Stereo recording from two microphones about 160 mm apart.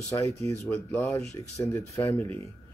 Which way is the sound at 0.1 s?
20° left (ahead or behind).